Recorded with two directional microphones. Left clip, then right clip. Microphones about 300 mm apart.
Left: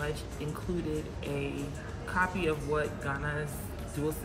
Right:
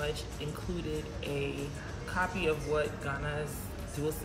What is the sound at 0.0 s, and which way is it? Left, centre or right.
Speech, centre.